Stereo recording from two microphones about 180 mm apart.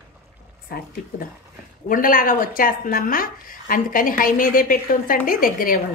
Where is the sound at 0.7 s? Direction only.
55° left (ahead or behind).